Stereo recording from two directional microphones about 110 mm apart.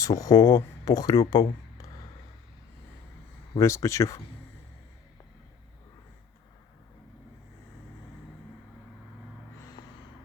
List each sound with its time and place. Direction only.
0.0 s speech: 35° left (ahead or behind)
3.5 s speech: 30° left (ahead or behind)